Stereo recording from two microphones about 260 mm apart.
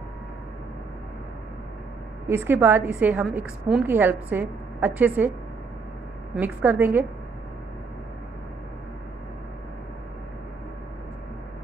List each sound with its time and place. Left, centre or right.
2.2 s a woman's voice: centre
6.3 s a woman's voice: centre